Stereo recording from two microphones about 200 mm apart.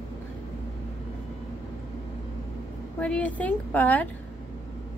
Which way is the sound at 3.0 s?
5° left (ahead or behind).